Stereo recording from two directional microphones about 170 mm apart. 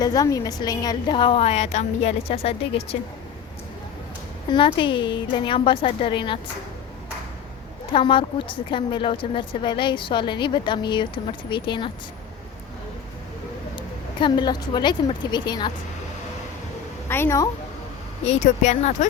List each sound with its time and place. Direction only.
0.0 s a woman's voice: 20° left (ahead or behind)
4.4 s a woman's voice: 30° left (ahead or behind)
7.9 s a woman's voice: 30° left (ahead or behind)
13.7 s a woman's voice: 30° left (ahead or behind)
17.1 s a woman's voice: 15° left (ahead or behind)
18.3 s speech: 45° left (ahead or behind)